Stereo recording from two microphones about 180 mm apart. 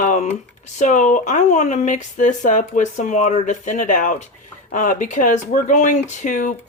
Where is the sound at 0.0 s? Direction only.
40° left (ahead or behind).